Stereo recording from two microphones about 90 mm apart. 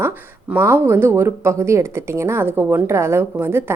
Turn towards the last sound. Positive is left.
turn(degrees=-25)  # may be behind; listen again after turning